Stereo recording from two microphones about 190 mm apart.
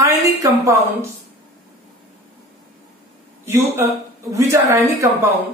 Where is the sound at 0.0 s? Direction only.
15° right (ahead or behind).